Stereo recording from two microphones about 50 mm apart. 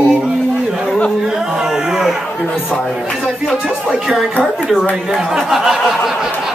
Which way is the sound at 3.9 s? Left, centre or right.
Centre.